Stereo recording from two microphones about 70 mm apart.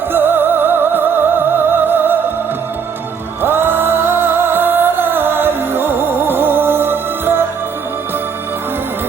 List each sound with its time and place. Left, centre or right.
0.1 s music: right
3.4 s music: right